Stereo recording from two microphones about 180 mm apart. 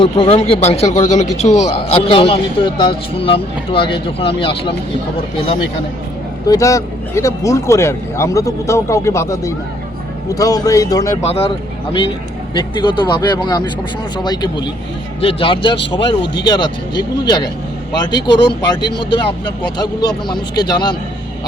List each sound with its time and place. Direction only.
0.0 s speech: 30° left (ahead or behind)
6.5 s speech: 20° left (ahead or behind)
11.2 s speech: 35° left (ahead or behind)
12.5 s speech: 25° left (ahead or behind)